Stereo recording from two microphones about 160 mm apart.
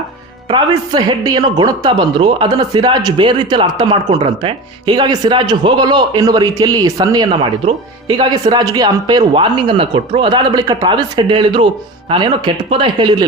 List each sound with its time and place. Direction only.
0.5 s speech: 25° right (ahead or behind)